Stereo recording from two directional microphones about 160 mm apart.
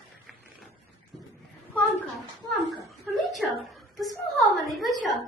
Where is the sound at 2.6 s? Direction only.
20° right (ahead or behind).